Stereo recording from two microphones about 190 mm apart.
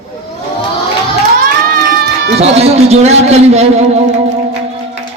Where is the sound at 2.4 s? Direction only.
35° right (ahead or behind).